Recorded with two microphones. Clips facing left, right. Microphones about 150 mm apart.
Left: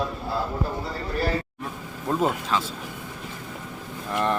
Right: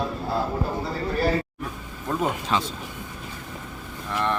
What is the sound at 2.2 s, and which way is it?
Speech, centre (ahead or behind).